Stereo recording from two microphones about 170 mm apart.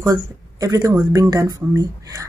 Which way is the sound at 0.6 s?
20° right (ahead or behind).